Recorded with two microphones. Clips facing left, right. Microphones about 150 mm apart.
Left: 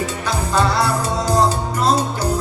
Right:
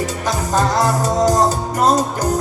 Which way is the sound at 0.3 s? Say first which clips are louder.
Right 1 dB; 45° right (ahead or behind).